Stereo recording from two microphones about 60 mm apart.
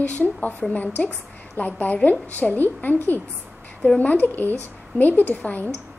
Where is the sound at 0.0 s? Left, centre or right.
Left.